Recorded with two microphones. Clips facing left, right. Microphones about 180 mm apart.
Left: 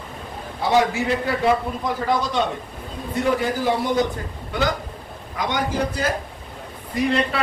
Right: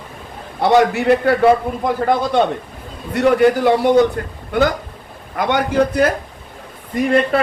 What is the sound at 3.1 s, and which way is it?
A man's voice, 70° right (ahead or behind).